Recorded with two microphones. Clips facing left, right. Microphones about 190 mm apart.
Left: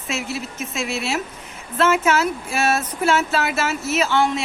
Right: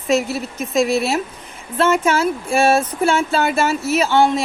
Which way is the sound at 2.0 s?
30° right (ahead or behind).